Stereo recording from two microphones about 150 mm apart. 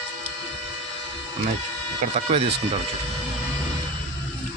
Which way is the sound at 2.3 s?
40° right (ahead or behind).